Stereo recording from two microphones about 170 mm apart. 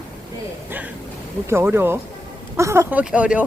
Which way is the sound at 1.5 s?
15° right (ahead or behind).